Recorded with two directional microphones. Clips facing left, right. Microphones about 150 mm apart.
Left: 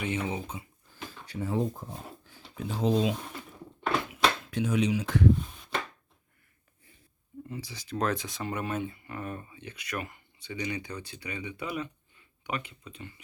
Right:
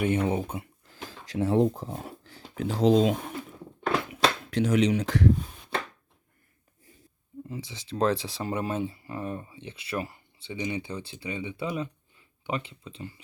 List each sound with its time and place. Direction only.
0.0 s speech: 55° right (ahead or behind); by 5.3 s 85° right
7.4 s speech: 25° right (ahead or behind)